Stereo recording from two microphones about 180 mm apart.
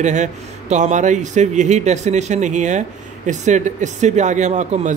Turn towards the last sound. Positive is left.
turn(degrees=-40)  # may be behind; listen again after turning